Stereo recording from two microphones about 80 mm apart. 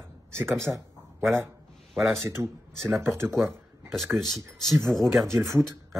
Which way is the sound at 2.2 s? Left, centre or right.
Right.